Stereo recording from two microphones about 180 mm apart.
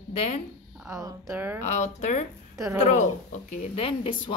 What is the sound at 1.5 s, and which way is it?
Speech, 40° left (ahead or behind).